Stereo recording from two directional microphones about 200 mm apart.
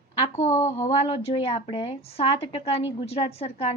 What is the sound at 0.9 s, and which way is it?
A woman's voice, 30° left (ahead or behind).